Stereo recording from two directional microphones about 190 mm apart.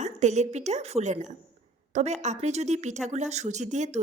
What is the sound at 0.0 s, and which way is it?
A woman's voice, 35° right (ahead or behind).